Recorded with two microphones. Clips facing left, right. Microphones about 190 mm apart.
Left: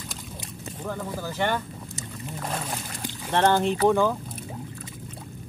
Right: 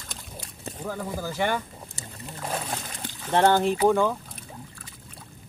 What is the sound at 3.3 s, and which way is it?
Speech, 10° right (ahead or behind).